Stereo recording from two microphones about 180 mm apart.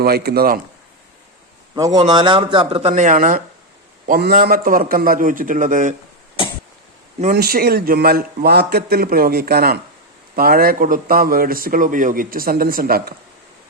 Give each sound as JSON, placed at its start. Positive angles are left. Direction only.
{"t": 0.0, "sound": "a man's voice", "side_deg": -60}
{"t": 1.7, "sound": "a man's voice", "side_deg": -20}
{"t": 6.4, "sound": "cough", "side_deg": 30}
{"t": 7.3, "sound": "a man's voice", "side_deg": -55}